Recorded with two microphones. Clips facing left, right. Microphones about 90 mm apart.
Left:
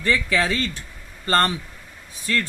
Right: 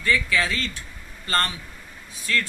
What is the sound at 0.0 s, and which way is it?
Speech, 50° left (ahead or behind).